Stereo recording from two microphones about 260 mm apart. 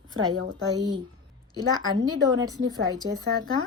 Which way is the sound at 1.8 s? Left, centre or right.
Centre.